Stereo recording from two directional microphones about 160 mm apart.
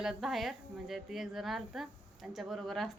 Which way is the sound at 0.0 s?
Centre (ahead or behind).